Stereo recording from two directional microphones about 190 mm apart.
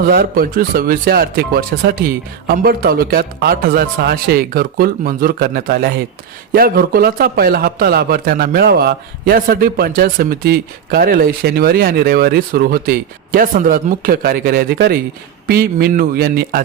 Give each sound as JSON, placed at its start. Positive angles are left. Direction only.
{"t": 0.0, "sound": "a man's voice", "side_deg": -50}